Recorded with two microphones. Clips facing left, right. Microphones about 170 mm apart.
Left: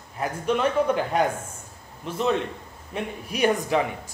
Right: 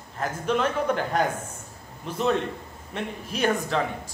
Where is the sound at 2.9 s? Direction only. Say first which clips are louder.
Left 1 dB; 15° left (ahead or behind).